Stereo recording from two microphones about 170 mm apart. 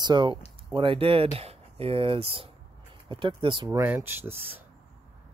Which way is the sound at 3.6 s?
15° right (ahead or behind).